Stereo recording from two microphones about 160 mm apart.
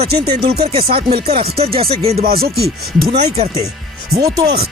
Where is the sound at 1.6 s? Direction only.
35° right (ahead or behind).